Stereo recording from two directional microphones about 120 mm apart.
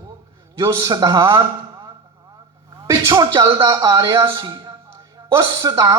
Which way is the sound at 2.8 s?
30° right (ahead or behind).